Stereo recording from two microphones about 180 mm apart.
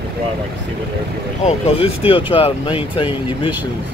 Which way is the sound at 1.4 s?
35° left (ahead or behind).